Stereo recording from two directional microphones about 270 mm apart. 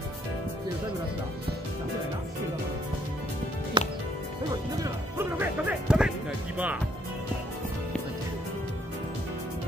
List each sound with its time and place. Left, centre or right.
3.8 s music: centre